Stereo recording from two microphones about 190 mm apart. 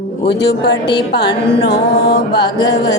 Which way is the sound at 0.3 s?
65° left (ahead or behind).